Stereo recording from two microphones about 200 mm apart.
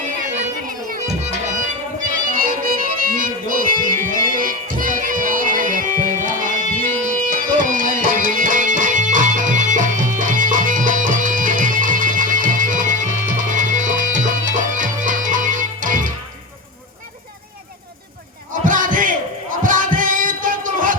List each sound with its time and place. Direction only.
0.4 s music: 40° right (ahead or behind)
18.6 s a sound: 40° right (ahead or behind)
19.6 s music: 40° right (ahead or behind)